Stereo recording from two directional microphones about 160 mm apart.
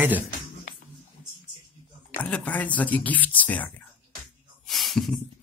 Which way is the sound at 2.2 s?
10° left (ahead or behind).